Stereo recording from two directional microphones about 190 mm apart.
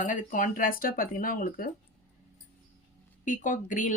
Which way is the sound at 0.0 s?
40° left (ahead or behind).